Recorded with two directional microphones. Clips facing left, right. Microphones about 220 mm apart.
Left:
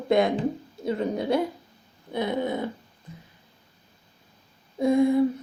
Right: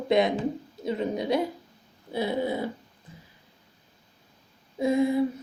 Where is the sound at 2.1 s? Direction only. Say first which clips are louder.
Left 1 dB; 10° right (ahead or behind).